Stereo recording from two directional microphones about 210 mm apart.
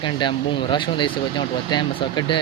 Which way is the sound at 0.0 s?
20° left (ahead or behind).